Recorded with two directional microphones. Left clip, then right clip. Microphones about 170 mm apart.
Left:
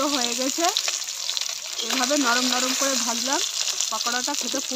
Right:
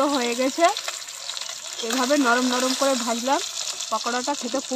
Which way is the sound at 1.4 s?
20° left (ahead or behind).